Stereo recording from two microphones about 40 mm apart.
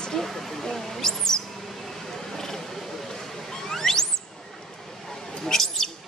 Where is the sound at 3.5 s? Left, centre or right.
Centre.